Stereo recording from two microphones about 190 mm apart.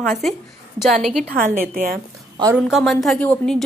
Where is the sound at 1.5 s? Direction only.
40° right (ahead or behind).